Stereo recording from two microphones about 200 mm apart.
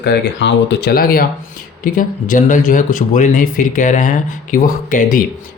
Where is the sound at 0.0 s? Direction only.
60° left (ahead or behind).